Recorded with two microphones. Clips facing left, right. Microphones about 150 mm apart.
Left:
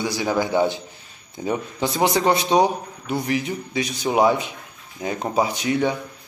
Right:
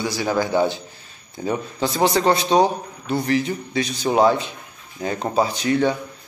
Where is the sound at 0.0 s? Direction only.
20° left (ahead or behind).